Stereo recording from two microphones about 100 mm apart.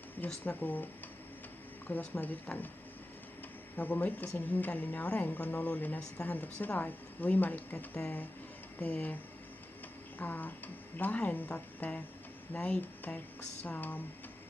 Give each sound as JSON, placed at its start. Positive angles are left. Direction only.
{"t": 0.3, "sound": "a woman's voice", "side_deg": 15}
{"t": 1.9, "sound": "a woman's voice", "side_deg": 15}
{"t": 3.7, "sound": "a woman's voice", "side_deg": 15}